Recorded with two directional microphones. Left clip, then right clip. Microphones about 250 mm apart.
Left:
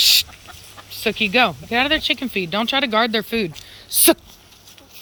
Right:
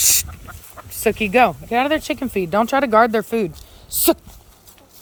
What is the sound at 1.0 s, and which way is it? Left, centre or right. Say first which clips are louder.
Speech: right 2 dB; centre.